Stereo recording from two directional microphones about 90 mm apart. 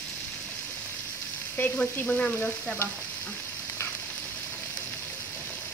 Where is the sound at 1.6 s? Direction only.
15° left (ahead or behind).